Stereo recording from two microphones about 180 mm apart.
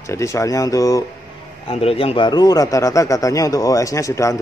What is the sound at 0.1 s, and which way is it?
Speech, 15° left (ahead or behind).